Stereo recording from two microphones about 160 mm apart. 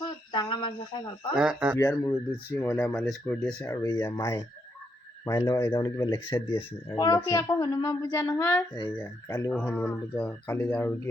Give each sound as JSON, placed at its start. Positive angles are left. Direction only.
{"t": 0.3, "sound": "a sound", "side_deg": 25}
{"t": 1.4, "sound": "speech", "side_deg": -5}
{"t": 1.8, "sound": "speech", "side_deg": 20}
{"t": 3.6, "sound": "speech", "side_deg": 20}
{"t": 5.5, "sound": "speech", "side_deg": 15}
{"t": 5.8, "sound": "speech", "side_deg": 25}